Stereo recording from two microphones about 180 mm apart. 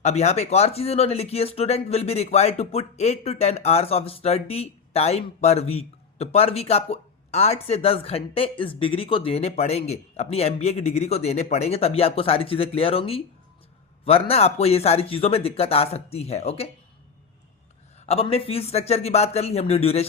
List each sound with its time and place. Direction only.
0.0 s speech: 40° left (ahead or behind)
18.0 s speech: 35° left (ahead or behind)